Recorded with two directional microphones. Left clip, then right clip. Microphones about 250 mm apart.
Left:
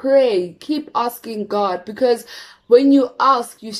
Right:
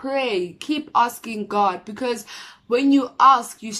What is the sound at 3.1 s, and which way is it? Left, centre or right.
Speech, right.